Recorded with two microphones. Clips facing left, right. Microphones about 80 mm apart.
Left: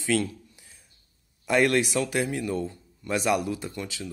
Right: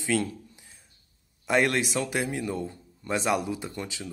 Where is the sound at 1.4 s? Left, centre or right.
Right.